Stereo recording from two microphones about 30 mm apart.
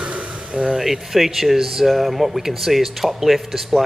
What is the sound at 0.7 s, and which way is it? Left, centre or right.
Speech, centre.